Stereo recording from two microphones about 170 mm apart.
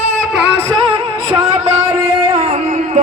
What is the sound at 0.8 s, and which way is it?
Music, 30° right (ahead or behind).